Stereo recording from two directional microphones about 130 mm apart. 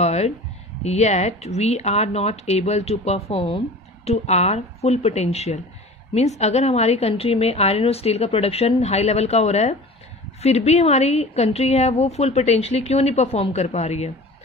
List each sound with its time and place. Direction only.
0.0 s a woman's voice: 55° left (ahead or behind)